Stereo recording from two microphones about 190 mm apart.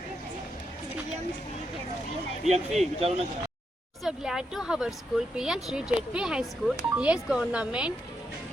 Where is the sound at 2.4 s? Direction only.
35° right (ahead or behind).